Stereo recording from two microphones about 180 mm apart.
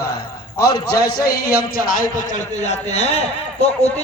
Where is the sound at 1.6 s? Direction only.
50° left (ahead or behind).